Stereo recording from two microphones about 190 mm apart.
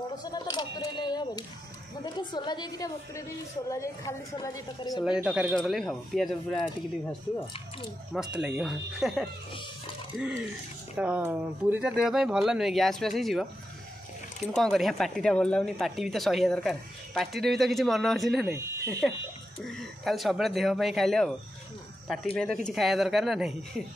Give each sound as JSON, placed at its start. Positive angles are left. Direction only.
{"t": 0.2, "sound": "a sound", "side_deg": 20}
{"t": 2.0, "sound": "a woman's voice", "side_deg": 20}
{"t": 5.0, "sound": "speech", "side_deg": -5}
{"t": 8.1, "sound": "speech", "side_deg": -5}
{"t": 14.5, "sound": "speech", "side_deg": 0}